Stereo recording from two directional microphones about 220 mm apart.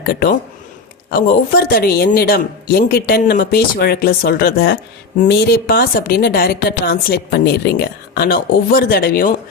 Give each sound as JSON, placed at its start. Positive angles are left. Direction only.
{"t": 0.0, "sound": "speech", "side_deg": 45}